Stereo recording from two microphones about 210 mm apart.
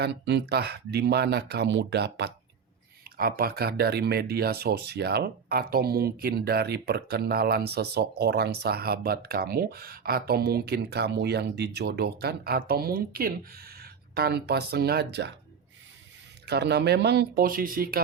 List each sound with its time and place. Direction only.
0.0 s speech: 55° right (ahead or behind)
16.5 s speech: 50° right (ahead or behind)